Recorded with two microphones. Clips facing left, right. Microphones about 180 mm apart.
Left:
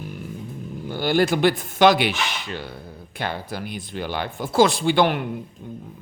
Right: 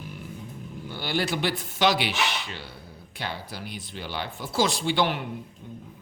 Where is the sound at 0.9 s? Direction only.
45° left (ahead or behind).